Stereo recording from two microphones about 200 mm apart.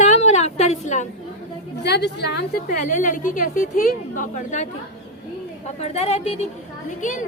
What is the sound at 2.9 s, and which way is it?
A woman's voice, 40° left (ahead or behind).